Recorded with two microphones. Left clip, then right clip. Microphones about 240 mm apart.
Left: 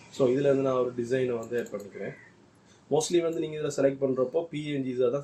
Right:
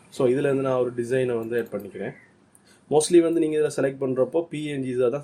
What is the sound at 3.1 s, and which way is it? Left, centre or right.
Speech, right.